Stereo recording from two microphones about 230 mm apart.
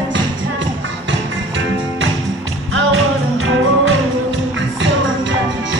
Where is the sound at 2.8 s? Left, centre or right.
Right.